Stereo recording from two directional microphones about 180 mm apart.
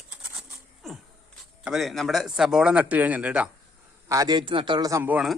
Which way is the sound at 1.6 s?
Centre (ahead or behind).